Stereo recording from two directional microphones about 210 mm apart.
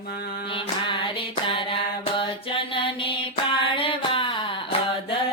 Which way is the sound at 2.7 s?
25° left (ahead or behind).